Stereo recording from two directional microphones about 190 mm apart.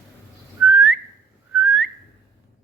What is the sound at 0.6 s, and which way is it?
Whistling, 5° right (ahead or behind).